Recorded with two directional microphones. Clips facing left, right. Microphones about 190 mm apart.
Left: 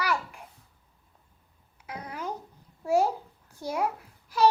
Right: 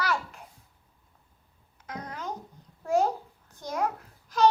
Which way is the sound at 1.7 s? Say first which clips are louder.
Even; 10° left (ahead or behind).